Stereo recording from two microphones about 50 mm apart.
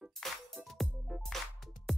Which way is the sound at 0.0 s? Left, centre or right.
Centre.